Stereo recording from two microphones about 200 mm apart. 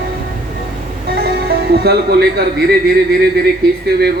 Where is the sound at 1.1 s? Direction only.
50° right (ahead or behind).